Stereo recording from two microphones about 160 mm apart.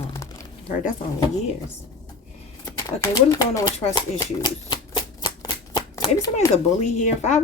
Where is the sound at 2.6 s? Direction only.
20° left (ahead or behind).